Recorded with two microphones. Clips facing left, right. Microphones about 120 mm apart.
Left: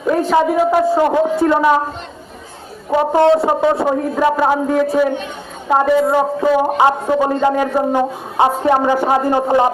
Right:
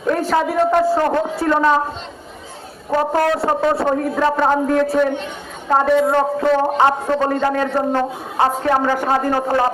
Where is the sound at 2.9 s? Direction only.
10° left (ahead or behind).